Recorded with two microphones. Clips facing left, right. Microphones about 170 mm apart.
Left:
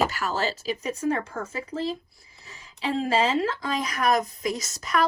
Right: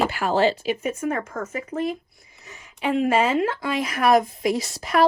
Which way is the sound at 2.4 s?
30° left (ahead or behind).